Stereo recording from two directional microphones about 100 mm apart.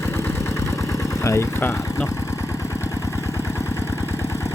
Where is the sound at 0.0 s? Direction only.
25° left (ahead or behind).